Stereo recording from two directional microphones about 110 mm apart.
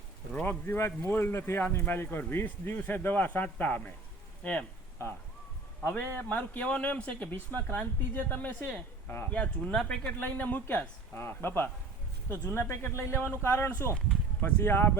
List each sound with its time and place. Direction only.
0.3 s a man's voice: 20° left (ahead or behind)